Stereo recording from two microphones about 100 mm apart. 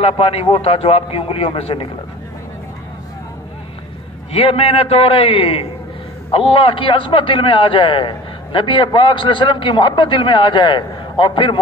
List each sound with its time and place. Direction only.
0.0 s a man's voice: 75° left (ahead or behind)
4.3 s a man's voice: 70° left (ahead or behind)